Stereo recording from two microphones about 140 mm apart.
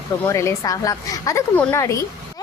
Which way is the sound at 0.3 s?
20° left (ahead or behind).